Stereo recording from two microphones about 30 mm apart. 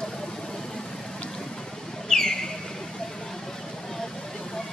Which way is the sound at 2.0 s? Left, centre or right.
Left.